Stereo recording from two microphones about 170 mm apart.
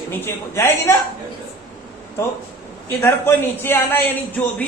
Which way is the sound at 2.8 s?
15° left (ahead or behind).